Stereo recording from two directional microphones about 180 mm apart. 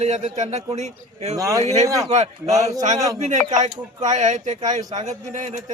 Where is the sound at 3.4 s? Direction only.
40° right (ahead or behind).